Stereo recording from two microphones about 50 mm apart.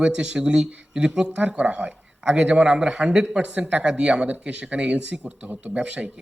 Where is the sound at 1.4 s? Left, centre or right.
Right.